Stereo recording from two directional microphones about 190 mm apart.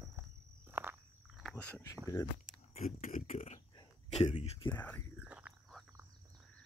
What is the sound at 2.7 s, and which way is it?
Speech, 40° left (ahead or behind).